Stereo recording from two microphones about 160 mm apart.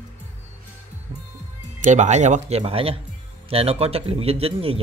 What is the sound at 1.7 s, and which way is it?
Speech, 50° right (ahead or behind).